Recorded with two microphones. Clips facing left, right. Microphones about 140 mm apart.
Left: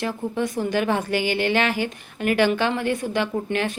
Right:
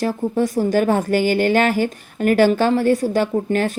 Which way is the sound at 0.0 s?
40° right (ahead or behind).